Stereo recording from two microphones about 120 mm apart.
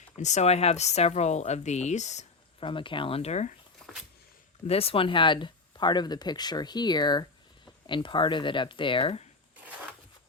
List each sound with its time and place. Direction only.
0.2 s speech: 75° left (ahead or behind)
2.6 s speech: 45° left (ahead or behind); by 3.5 s 65° left (ahead or behind)
4.6 s speech: 55° left (ahead or behind)